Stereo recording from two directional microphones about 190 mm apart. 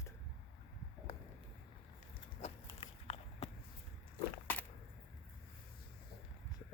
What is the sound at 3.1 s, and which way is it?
Walk, 30° left (ahead or behind).